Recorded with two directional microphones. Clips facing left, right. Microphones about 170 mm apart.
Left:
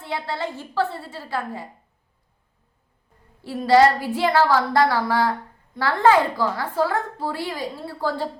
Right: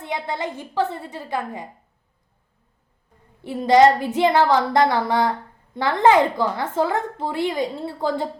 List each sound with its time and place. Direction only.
0.0 s a woman's voice: 20° right (ahead or behind)
3.4 s a woman's voice: 20° right (ahead or behind)